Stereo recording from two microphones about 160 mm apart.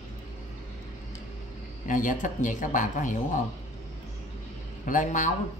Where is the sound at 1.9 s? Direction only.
55° left (ahead or behind).